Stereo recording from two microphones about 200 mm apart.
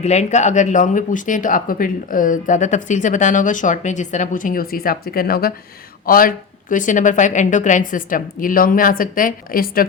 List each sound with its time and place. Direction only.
0.0 s a woman's voice: 35° left (ahead or behind)